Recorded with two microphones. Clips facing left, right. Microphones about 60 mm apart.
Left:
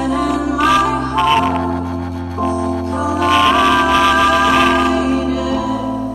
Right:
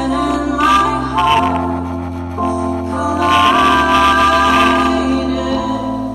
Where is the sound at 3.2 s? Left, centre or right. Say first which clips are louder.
Right 1 dB; centre.